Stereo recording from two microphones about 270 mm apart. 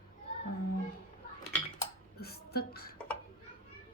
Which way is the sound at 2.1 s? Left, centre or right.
Left.